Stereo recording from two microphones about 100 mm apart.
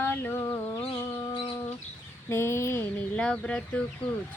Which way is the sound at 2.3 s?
25° left (ahead or behind).